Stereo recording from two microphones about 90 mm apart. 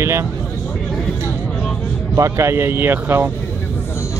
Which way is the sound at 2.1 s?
35° right (ahead or behind).